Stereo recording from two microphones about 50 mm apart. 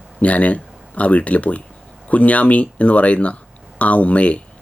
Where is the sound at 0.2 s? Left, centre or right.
Left.